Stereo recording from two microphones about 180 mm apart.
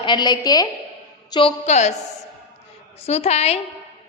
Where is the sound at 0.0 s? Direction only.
25° left (ahead or behind); by 2.0 s 40° left (ahead or behind).